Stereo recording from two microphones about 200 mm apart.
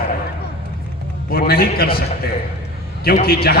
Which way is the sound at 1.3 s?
50° left (ahead or behind).